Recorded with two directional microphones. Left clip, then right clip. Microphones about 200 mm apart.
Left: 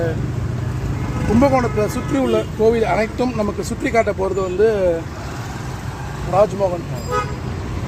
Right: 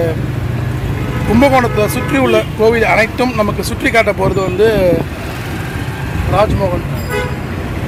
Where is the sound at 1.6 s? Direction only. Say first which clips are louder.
Right 6 dB; 5° right (ahead or behind).